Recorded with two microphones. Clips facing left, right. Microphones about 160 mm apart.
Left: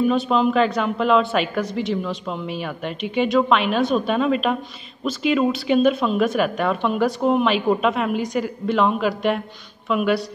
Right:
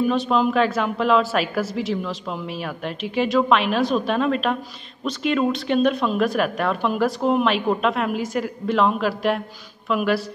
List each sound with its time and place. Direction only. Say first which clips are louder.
0.0 s a woman's voice: left 1 dB; centre (ahead or behind)